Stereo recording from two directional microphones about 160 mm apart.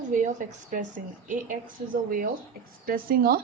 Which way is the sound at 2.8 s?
65° right (ahead or behind).